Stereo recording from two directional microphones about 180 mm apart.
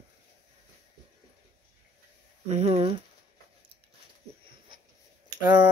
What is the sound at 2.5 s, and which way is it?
Speech, 35° right (ahead or behind).